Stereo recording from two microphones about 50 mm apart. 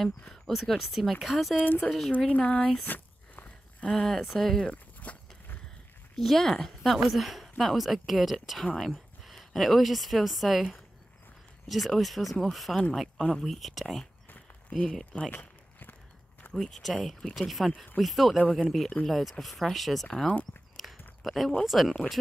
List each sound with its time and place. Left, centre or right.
0.3 s a woman's voice: centre
1.6 s speech: left
1.9 s a woman's voice: centre
2.1 s speech: left
2.8 s a sound: left
3.9 s speech: centre
5.1 s a sound: left
6.1 s a woman's voice: centre
15.3 s a sound: left
16.5 s a woman's voice: centre
17.4 s a woman's voice: centre
20.2 s speech: left
21.2 s a woman's voice: centre